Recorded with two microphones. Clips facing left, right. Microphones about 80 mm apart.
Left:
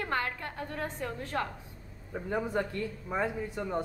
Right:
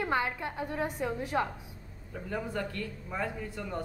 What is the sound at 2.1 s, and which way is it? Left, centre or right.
Speech, left.